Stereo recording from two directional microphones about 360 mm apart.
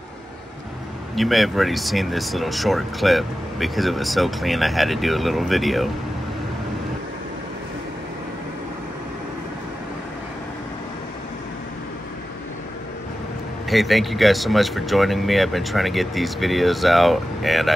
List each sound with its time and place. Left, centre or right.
1.1 s speech: centre
13.7 s speech: centre